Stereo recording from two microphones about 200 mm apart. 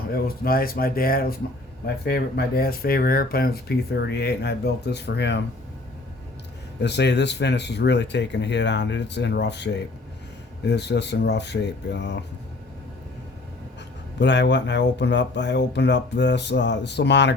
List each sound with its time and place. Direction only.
0.1 s speech: 50° left (ahead or behind)
6.8 s speech: 60° left (ahead or behind)
14.2 s speech: 60° left (ahead or behind)